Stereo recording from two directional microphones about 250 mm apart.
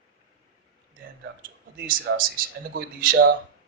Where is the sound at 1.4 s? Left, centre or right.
Right.